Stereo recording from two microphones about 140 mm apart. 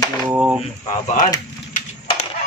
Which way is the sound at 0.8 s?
65° left (ahead or behind).